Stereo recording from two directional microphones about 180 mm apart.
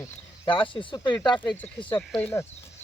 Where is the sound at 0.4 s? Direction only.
25° left (ahead or behind).